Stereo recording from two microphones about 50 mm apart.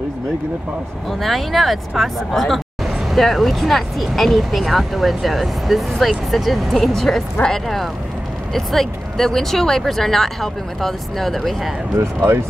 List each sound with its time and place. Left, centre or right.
1.2 s speech: centre
12.0 s speech: right